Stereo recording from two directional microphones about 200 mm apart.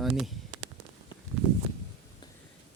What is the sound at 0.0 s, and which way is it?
Speech, centre (ahead or behind).